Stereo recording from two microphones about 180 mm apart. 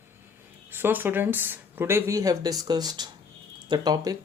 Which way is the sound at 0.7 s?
10° right (ahead or behind).